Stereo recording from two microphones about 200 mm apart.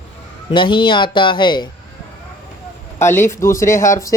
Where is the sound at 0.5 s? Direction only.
25° left (ahead or behind).